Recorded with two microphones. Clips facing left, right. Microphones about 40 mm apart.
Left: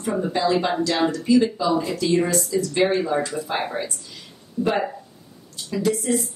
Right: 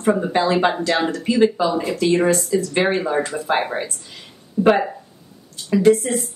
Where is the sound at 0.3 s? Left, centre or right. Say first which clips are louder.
Right 3 dB; right.